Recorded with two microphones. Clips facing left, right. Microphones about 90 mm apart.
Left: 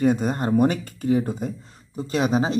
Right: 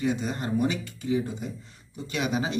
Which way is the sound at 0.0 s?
45° left (ahead or behind).